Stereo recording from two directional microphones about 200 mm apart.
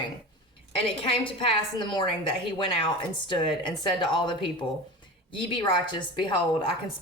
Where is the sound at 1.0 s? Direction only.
25° left (ahead or behind).